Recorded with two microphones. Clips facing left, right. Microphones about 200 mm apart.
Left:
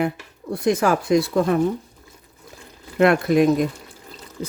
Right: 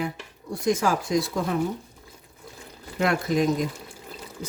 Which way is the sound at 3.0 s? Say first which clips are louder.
Left 7 dB; 65° left (ahead or behind).